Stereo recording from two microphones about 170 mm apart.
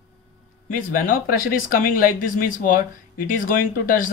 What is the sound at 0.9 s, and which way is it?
Speech, 55° left (ahead or behind).